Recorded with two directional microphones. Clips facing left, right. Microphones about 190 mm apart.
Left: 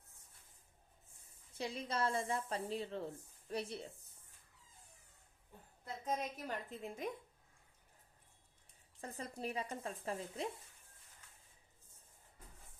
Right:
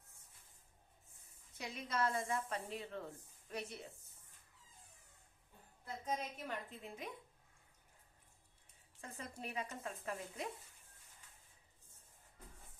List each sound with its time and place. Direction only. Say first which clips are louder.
1.5 s speech: left 1 dB; 30° left (ahead or behind)
6.1 s speech: left 2 dB; 40° left (ahead or behind)
9.0 s speech: left 4 dB; 35° left (ahead or behind)